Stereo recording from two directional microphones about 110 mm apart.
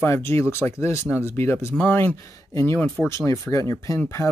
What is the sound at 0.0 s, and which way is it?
Speech, 20° left (ahead or behind).